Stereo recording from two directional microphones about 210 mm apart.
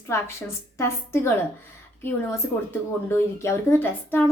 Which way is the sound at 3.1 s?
10° left (ahead or behind).